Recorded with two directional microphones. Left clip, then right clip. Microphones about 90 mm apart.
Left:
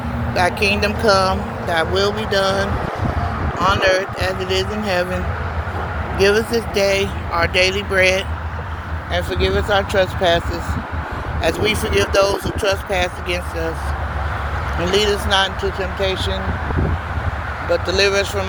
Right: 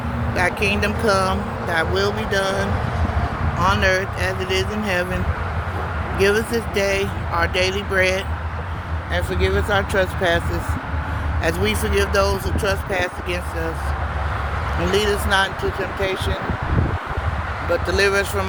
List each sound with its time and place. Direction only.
0.8 s speech: 35° right (ahead or behind)
1.6 s speech: 20° right (ahead or behind)
6.1 s speech: 30° right (ahead or behind)
11.4 s speech: 40° right (ahead or behind)
14.8 s speech: 30° right (ahead or behind)
15.0 s speech: 50° right (ahead or behind)
17.7 s speech: 85° right